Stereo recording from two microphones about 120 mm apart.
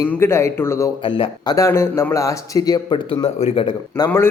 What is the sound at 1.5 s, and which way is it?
Speech, 25° left (ahead or behind).